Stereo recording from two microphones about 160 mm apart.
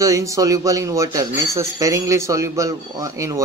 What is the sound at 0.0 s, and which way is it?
Speech, 20° right (ahead or behind).